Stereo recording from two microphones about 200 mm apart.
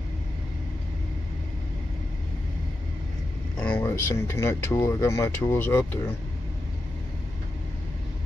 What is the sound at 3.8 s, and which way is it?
Speech, 15° left (ahead or behind).